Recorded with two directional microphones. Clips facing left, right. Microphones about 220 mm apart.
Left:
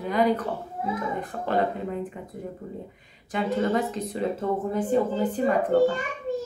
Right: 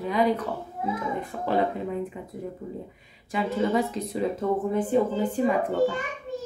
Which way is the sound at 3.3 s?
5° right (ahead or behind).